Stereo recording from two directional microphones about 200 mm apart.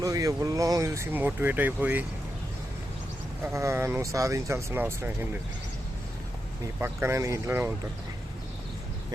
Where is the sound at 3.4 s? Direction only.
15° right (ahead or behind).